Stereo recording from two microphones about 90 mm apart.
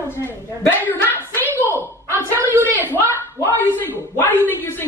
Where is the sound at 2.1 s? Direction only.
25° right (ahead or behind).